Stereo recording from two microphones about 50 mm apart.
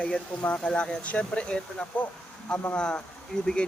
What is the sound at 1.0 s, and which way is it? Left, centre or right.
Speech, left.